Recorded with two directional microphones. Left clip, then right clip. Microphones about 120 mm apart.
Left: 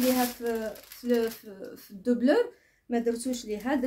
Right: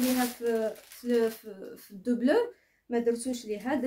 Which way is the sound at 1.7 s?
15° left (ahead or behind).